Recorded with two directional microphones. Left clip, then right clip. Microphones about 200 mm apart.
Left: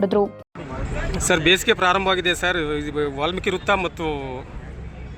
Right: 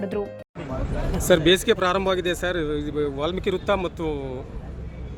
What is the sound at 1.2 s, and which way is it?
Speech, 5° right (ahead or behind).